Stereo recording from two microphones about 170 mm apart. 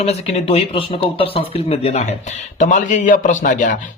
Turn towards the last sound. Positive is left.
turn(degrees=50)  # may be behind; listen again after turning